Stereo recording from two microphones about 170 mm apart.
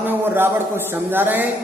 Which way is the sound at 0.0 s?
10° right (ahead or behind).